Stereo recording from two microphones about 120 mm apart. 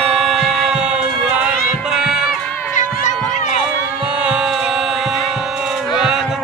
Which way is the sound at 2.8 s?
90° left.